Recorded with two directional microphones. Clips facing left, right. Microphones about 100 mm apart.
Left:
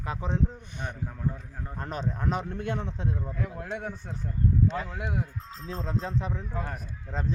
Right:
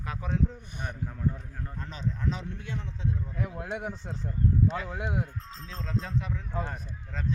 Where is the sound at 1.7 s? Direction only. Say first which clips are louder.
Left 4 dB; 55° left (ahead or behind).